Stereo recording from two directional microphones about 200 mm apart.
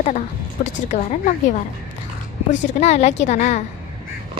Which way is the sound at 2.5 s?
35° left (ahead or behind).